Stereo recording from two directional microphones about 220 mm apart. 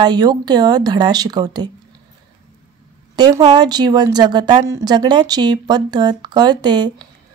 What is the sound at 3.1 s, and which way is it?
Speech, 20° right (ahead or behind).